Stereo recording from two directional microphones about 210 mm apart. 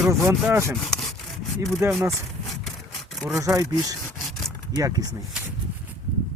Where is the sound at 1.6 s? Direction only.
15° right (ahead or behind).